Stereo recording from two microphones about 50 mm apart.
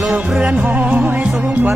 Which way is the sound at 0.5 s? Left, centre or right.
Right.